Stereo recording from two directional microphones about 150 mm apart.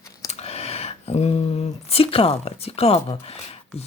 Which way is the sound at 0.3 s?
45° left (ahead or behind).